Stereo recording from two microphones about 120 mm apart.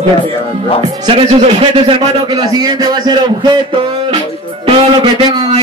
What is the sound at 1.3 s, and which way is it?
A man's voice, 60° right (ahead or behind).